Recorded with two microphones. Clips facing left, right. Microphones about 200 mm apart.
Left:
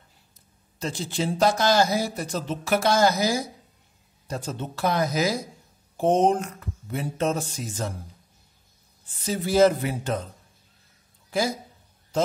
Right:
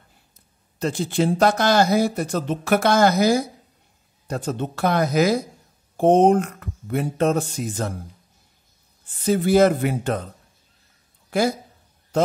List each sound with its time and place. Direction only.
0.7 s speech: 60° right (ahead or behind)
9.2 s speech: 55° right (ahead or behind)
11.2 s speech: 60° right (ahead or behind)